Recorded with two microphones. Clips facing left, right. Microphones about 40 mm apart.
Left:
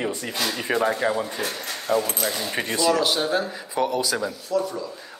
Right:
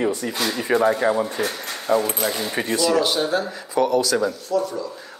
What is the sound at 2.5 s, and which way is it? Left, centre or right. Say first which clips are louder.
Speech: right 1 dB; centre.